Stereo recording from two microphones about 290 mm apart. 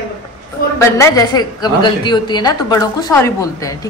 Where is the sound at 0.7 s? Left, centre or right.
Centre.